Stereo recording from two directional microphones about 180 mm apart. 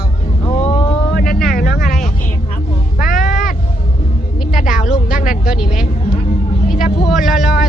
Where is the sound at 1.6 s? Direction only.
50° left (ahead or behind).